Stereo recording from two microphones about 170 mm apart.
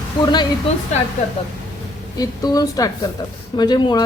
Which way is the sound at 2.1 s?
20° left (ahead or behind).